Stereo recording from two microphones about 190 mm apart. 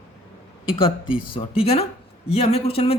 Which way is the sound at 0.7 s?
30° left (ahead or behind).